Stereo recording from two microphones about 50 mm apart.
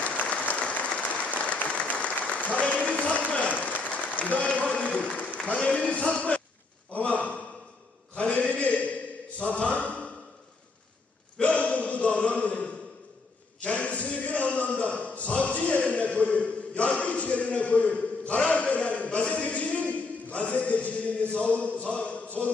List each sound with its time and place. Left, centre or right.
0.2 s applause: left
5.5 s speech: left
7.0 s gasp: left
8.1 s a sound: left
11.3 s a sound: left
19.9 s music: left